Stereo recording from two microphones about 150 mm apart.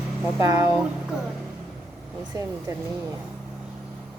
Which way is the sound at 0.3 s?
20° right (ahead or behind).